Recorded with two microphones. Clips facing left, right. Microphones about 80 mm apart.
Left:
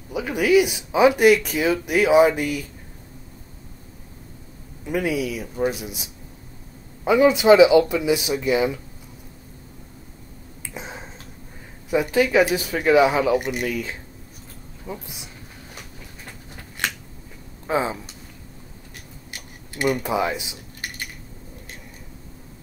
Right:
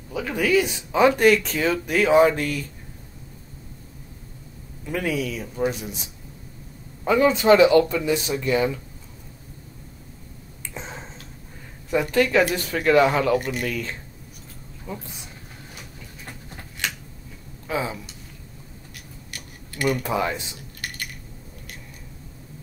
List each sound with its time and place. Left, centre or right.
0.1 s speech: centre
4.8 s speech: centre
7.1 s speech: centre
10.7 s finger snapping: centre
11.9 s speech: centre
17.6 s speech: left
19.3 s speech: left